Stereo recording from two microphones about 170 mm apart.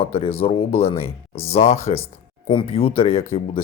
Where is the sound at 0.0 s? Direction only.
35° left (ahead or behind).